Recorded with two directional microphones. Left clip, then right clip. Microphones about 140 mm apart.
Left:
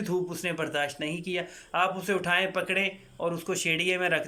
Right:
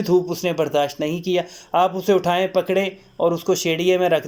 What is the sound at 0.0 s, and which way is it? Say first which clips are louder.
Speech: right 11 dB; 30° right (ahead or behind).